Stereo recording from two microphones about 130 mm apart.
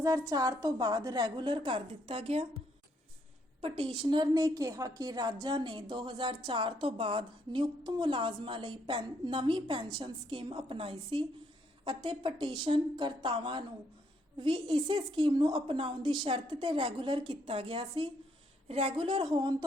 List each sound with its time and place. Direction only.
0.0 s a woman's voice: 30° right (ahead or behind); by 2.5 s 50° right (ahead or behind)
3.6 s a woman's voice: 45° right (ahead or behind)